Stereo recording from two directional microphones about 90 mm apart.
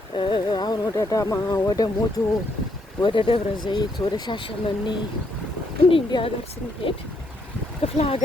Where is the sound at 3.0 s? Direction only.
60° left (ahead or behind).